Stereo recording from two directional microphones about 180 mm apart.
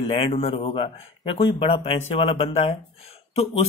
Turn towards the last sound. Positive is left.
turn(degrees=35)  # may be behind; listen again after turning